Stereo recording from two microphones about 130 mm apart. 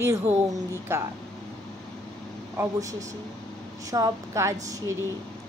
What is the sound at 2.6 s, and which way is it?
Speech, 25° right (ahead or behind).